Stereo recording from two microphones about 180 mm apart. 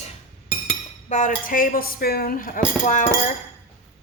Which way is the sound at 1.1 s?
40° left (ahead or behind).